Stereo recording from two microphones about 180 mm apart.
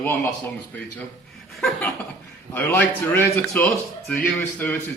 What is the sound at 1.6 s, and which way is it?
A man's voice, 5° left (ahead or behind).